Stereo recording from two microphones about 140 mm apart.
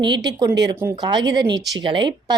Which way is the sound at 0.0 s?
30° right (ahead or behind).